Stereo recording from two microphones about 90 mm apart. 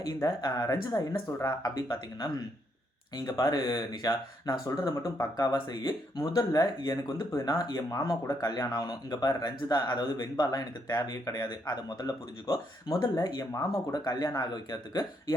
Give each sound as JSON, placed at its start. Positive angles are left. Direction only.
{"t": 0.0, "sound": "speech", "side_deg": 45}
{"t": 1.3, "sound": "speech", "side_deg": 35}
{"t": 3.2, "sound": "speech", "side_deg": 50}
{"t": 4.1, "sound": "speech", "side_deg": 60}
{"t": 4.9, "sound": "speech", "side_deg": 40}
{"t": 12.5, "sound": "speech", "side_deg": 30}
{"t": 13.1, "sound": "speech", "side_deg": 40}
{"t": 14.0, "sound": "speech", "side_deg": 50}